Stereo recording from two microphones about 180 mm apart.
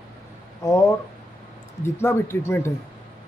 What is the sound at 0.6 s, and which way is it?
Speech, 15° left (ahead or behind).